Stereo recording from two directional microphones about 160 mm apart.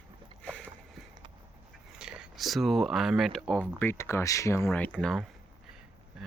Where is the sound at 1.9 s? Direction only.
5° right (ahead or behind).